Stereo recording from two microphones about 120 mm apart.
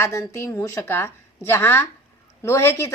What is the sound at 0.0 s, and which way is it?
A woman's voice, 25° left (ahead or behind).